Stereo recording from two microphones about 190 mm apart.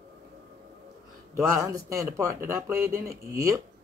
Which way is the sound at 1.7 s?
15° right (ahead or behind).